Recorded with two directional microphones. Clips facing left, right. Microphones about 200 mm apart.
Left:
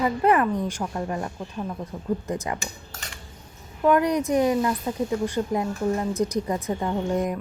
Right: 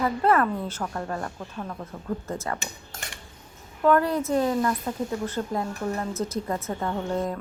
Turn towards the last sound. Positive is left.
turn(degrees=15)  # may be behind; listen again after turning